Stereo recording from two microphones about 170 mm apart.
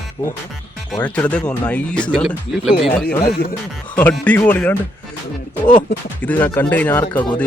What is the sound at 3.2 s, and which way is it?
Speech, 65° left (ahead or behind).